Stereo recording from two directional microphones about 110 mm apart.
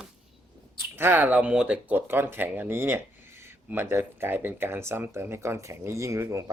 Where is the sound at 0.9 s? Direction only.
20° right (ahead or behind).